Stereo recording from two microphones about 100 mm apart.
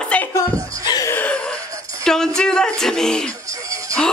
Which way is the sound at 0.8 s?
40° left (ahead or behind).